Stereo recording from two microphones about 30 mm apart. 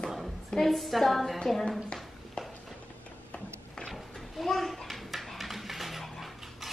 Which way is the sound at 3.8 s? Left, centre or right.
Centre.